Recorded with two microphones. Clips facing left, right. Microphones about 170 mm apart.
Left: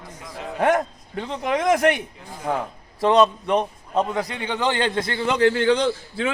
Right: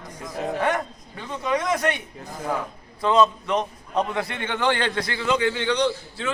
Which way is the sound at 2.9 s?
70° left (ahead or behind).